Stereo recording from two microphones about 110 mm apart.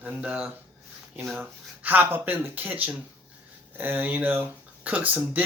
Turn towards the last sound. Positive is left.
turn(degrees=-15)  # may be behind; listen again after turning